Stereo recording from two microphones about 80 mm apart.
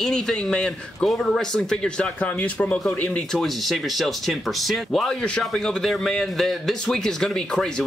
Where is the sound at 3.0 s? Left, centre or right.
Centre.